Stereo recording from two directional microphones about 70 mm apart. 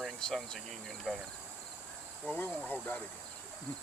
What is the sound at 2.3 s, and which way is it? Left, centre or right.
Speech, left.